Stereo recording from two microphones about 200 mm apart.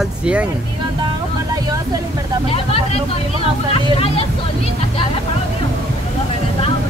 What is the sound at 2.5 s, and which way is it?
Speech, 30° left (ahead or behind).